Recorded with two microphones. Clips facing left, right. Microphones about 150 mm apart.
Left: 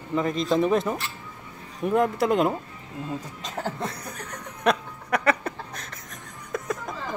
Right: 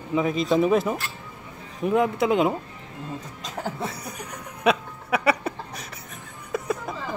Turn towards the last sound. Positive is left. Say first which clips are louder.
# right 2 dB
turn(degrees=-5)  # may be behind; listen again after turning